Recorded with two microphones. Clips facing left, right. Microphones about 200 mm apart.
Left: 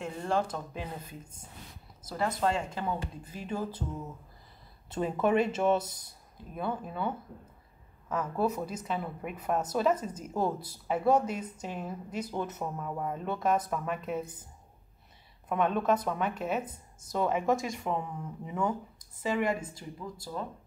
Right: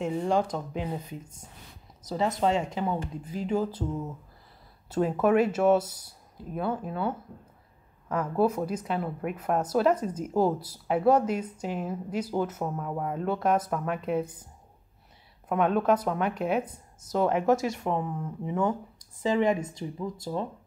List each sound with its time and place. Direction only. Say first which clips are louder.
0.2 s a woman's voice: right 1 dB; 15° right (ahead or behind)
2.0 s a woman's voice: right 4 dB; 20° right (ahead or behind)
5.0 s a woman's voice: right 4 dB; 5° right (ahead or behind)
18.9 s speech: right 7 dB; 15° right (ahead or behind)